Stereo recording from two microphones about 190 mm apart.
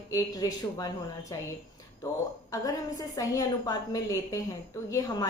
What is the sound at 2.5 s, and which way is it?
A woman's voice, 20° left (ahead or behind).